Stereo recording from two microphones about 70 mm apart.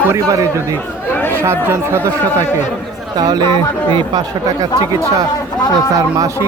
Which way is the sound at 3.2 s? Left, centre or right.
Right.